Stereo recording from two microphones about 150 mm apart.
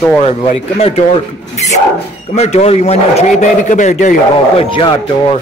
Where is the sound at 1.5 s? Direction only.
50° left (ahead or behind).